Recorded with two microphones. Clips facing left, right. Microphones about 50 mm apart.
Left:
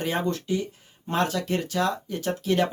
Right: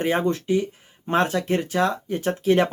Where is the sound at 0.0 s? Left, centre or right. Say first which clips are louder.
Right 5 dB; right.